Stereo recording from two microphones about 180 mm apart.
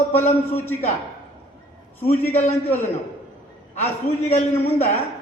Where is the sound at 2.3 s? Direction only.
35° left (ahead or behind).